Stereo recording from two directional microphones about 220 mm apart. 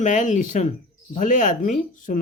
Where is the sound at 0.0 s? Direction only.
35° left (ahead or behind).